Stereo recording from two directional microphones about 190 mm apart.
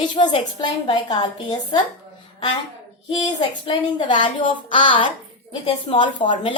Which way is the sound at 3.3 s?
25° left (ahead or behind).